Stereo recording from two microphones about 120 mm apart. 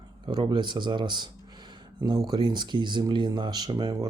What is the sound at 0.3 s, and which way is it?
Speech, 35° right (ahead or behind).